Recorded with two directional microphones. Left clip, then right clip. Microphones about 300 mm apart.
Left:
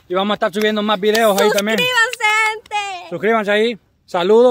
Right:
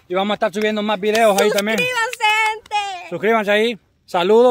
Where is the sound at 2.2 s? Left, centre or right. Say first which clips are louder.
Left 1 dB; centre.